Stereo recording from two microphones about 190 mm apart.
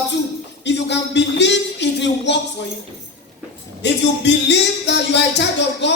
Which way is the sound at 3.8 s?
65° left (ahead or behind).